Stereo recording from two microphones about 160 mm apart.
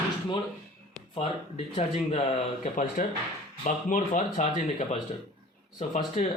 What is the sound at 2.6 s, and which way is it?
Speech, 55° left (ahead or behind).